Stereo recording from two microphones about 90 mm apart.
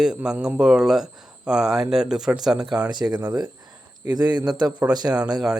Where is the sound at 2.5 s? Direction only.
50° right (ahead or behind).